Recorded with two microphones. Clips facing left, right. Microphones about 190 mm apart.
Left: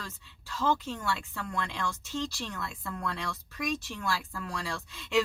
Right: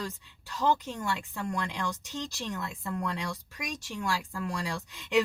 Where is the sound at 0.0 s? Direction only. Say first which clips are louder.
Right 7 dB; 15° right (ahead or behind).